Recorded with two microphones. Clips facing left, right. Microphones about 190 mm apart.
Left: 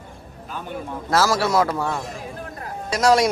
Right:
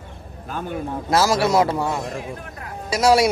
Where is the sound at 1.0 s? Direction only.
15° right (ahead or behind).